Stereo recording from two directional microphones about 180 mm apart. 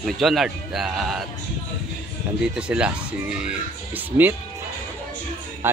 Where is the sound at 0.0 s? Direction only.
Centre (ahead or behind).